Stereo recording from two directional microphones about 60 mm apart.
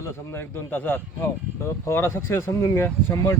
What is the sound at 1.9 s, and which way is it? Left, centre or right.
Speech, left.